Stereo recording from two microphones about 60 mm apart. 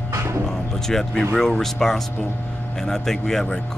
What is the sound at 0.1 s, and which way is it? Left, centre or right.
Music, right.